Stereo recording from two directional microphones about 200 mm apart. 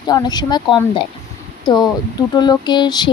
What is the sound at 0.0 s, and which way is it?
A woman's voice, 20° left (ahead or behind).